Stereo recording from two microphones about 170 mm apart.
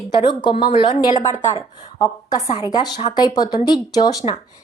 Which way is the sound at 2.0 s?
25° left (ahead or behind).